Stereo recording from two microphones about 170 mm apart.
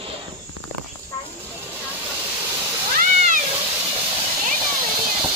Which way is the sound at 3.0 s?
50° right (ahead or behind).